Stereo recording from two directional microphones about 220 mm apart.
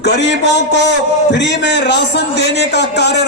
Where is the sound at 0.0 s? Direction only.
50° left (ahead or behind).